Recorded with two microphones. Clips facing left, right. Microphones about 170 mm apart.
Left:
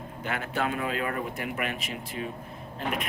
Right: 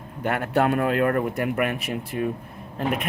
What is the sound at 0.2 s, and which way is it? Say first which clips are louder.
Speech: right 8 dB; 55° right (ahead or behind).